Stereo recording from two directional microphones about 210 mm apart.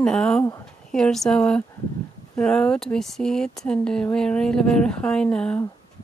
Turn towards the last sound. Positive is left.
turn(degrees=5)  # may be behind; listen again after turning